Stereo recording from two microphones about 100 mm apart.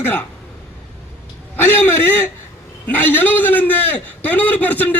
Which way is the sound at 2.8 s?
15° left (ahead or behind).